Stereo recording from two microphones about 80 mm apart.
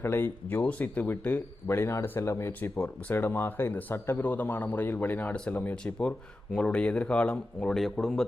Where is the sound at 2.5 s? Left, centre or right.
Left.